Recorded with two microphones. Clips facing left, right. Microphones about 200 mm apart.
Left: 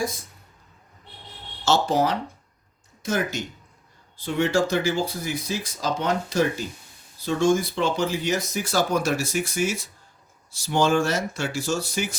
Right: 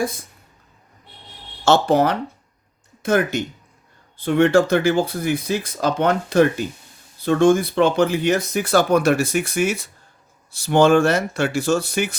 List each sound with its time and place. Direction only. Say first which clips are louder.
1.6 s speech: right 5 dB; 60° right (ahead or behind)